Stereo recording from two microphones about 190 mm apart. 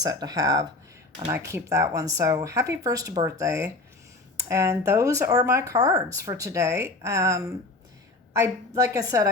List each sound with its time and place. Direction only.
0.0 s speech: 20° right (ahead or behind)